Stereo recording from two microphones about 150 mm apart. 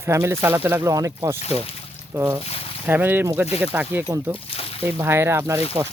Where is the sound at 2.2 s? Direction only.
15° right (ahead or behind).